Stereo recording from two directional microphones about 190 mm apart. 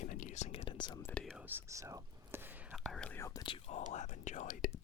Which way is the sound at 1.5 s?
15° right (ahead or behind).